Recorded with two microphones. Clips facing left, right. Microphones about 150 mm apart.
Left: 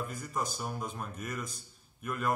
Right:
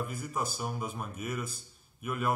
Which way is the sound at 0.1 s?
5° right (ahead or behind).